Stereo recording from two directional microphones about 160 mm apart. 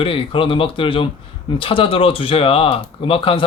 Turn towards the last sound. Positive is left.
turn(degrees=35)  # may be behind; listen again after turning